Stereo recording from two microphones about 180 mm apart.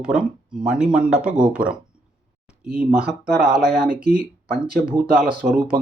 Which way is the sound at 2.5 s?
5° right (ahead or behind).